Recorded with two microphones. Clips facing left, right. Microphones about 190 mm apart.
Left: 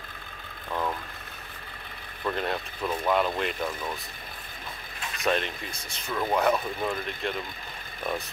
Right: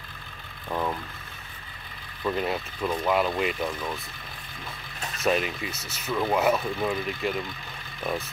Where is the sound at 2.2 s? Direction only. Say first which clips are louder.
Right 2 dB; 5° right (ahead or behind).